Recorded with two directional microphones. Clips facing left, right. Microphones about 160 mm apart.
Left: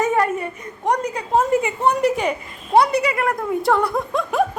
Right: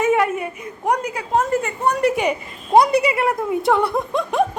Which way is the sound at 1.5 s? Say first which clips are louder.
Left 2 dB; 10° left (ahead or behind).